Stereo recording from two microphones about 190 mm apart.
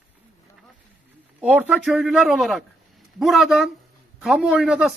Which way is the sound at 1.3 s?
5° right (ahead or behind).